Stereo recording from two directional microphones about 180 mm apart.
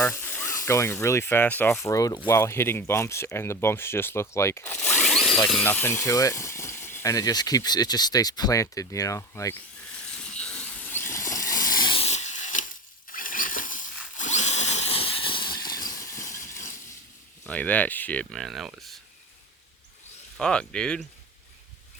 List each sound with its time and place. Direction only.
0.0 s speech: 10° left (ahead or behind)
10.3 s a sound: 5° left (ahead or behind); by 12.6 s 45° left (ahead or behind)
13.1 s drill: 50° left (ahead or behind); by 16.7 s 15° left (ahead or behind)
17.5 s speech: 10° left (ahead or behind)
20.3 s speech: 5° left (ahead or behind)